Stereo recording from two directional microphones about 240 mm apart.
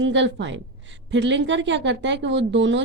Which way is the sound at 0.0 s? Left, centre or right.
Right.